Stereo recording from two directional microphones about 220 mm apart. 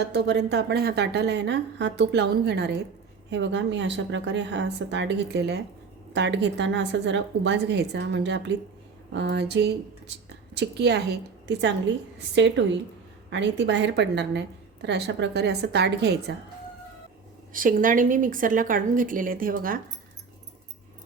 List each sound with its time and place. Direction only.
0.0 s a woman's voice: 50° right (ahead or behind)
17.5 s speech: 40° right (ahead or behind)